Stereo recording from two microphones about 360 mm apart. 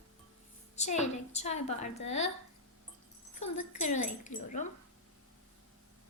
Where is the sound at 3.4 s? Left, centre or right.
Centre.